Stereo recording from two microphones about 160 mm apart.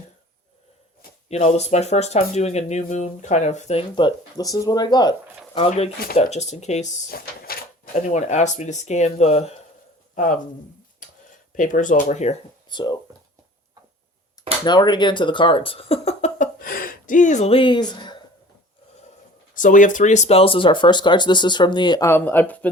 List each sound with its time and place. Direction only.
1.3 s speech: 45° left (ahead or behind); by 5.1 s 25° left (ahead or behind)
5.5 s speech: 40° left (ahead or behind)
7.1 s door: 65° left (ahead or behind)
8.1 s speech: 45° left (ahead or behind)
11.5 s speech: 55° left (ahead or behind)
12.6 s speech: 25° left (ahead or behind)
14.6 s speech: 25° left (ahead or behind)
19.5 s speech: 55° left (ahead or behind); by 22.7 s 10° left (ahead or behind)